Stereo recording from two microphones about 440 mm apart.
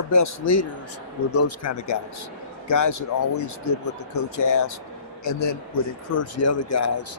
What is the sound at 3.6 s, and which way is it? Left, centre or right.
Speech, left.